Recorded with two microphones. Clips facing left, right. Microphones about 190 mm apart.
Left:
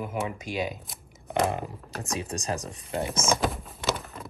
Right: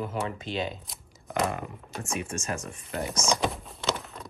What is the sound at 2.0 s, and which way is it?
Speech, 35° left (ahead or behind).